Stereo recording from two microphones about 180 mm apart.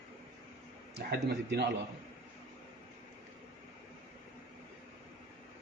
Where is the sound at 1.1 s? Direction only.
65° right (ahead or behind).